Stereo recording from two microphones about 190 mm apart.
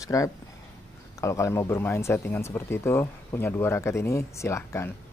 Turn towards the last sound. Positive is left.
turn(degrees=15)  # may be behind; listen again after turning